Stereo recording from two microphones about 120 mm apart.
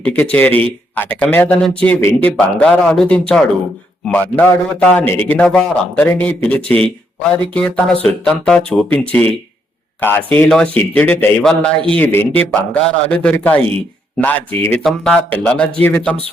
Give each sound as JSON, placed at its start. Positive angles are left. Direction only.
{"t": 0.0, "sound": "a man's voice", "side_deg": 10}
{"t": 2.0, "sound": "speech", "side_deg": 20}
{"t": 2.3, "sound": "a man's voice", "side_deg": 5}